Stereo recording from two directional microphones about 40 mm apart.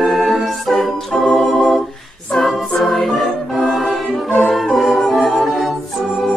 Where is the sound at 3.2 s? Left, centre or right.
Centre.